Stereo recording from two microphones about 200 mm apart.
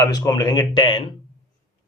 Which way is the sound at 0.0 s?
20° left (ahead or behind).